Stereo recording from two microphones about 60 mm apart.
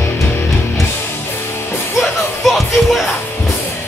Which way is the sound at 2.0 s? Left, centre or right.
Centre.